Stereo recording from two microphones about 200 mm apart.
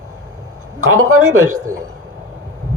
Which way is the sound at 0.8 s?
90° right.